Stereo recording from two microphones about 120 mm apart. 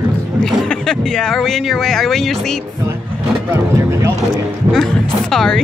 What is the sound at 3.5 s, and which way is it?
Speech, 20° right (ahead or behind).